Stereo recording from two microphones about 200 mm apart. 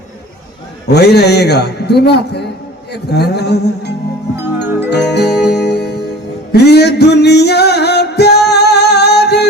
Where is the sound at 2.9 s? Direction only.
55° left (ahead or behind).